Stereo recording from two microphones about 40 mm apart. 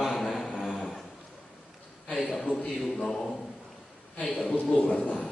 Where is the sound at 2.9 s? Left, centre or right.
Centre.